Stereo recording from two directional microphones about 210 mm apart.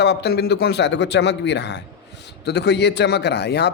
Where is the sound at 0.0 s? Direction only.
50° left (ahead or behind).